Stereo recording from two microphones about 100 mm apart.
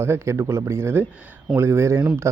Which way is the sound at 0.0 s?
25° right (ahead or behind).